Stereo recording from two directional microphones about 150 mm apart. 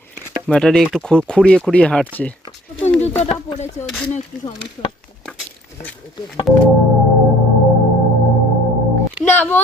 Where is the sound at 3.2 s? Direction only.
45° left (ahead or behind).